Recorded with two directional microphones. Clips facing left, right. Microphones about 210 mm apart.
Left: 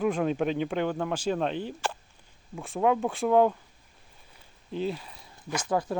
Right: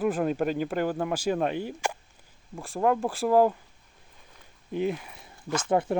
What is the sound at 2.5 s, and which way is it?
Speech, centre (ahead or behind).